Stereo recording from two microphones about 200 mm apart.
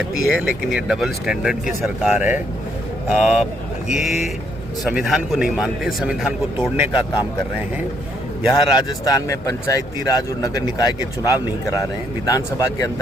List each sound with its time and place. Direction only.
0.3 s a man's voice: 5° right (ahead or behind)
8.5 s speech: 20° left (ahead or behind)